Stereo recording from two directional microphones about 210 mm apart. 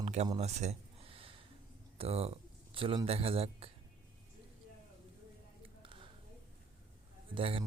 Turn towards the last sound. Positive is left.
turn(degrees=-25)  # may be behind; listen again after turning